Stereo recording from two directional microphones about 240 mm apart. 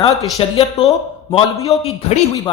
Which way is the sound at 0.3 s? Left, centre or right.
Left.